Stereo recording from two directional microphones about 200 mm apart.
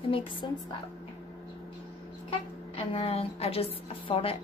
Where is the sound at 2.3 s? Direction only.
30° left (ahead or behind).